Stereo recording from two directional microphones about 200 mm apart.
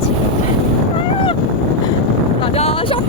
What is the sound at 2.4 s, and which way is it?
Boat, 30° left (ahead or behind).